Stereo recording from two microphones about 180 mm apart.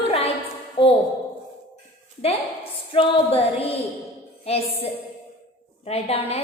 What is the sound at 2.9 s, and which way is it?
Speech, 30° left (ahead or behind).